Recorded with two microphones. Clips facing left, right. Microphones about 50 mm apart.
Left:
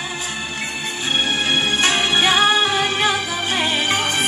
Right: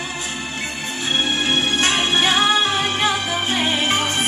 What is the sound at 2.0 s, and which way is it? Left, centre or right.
Music, left.